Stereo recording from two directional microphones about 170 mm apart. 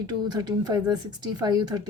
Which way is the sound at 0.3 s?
25° right (ahead or behind).